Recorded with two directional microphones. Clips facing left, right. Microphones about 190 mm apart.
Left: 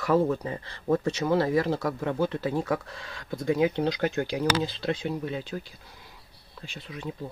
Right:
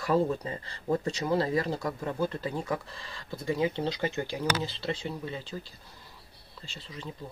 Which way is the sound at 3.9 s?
60° left (ahead or behind).